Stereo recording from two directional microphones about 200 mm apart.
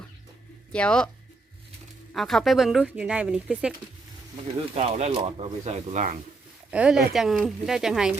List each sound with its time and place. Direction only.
0.7 s speech: 5° left (ahead or behind)
2.1 s speech: centre (ahead or behind)
4.7 s speech: 30° right (ahead or behind)
6.7 s speech: 5° right (ahead or behind)